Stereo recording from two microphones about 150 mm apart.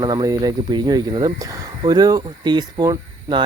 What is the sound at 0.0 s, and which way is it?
Speech, 25° right (ahead or behind).